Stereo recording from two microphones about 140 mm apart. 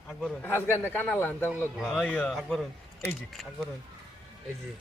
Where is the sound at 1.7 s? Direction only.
Centre (ahead or behind).